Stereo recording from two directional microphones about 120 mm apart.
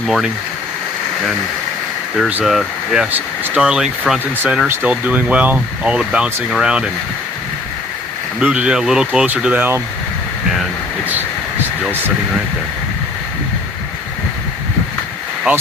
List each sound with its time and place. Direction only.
0.0 s speech: 5° right (ahead or behind)
2.4 s speech: centre (ahead or behind)
8.4 s speech: 10° right (ahead or behind)
15.5 s speech: 15° right (ahead or behind)